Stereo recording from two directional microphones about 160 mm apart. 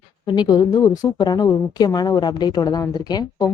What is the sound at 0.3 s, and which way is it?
A woman's voice, 25° left (ahead or behind).